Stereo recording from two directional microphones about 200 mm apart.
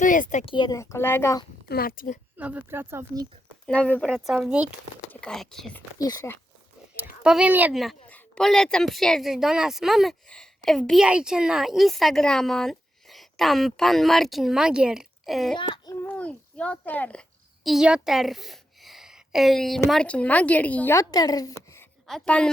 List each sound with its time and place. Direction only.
0.0 s speech: 40° left (ahead or behind)
0.5 s speech: 20° left (ahead or behind)
1.6 s a woman's voice: 50° left (ahead or behind)
2.4 s speech: 5° right (ahead or behind)
3.7 s a woman's voice: 5° left (ahead or behind)
6.0 s speech: 20° left (ahead or behind)
7.2 s a woman's voice: 5° right (ahead or behind)
15.5 s a sound: 20° left (ahead or behind)
16.0 s a sound: 5° left (ahead or behind)
19.9 s speech: 5° left (ahead or behind)
22.0 s a woman's voice: 5° left (ahead or behind)